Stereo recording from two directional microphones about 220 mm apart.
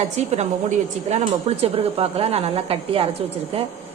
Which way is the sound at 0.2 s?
30° right (ahead or behind).